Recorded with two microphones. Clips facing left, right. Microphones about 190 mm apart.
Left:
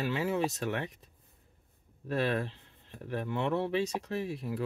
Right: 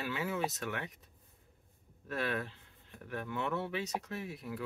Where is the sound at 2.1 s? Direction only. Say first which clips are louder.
Left 6 dB; 35° left (ahead or behind).